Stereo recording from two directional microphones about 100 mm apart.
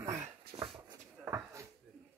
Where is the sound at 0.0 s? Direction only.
30° right (ahead or behind).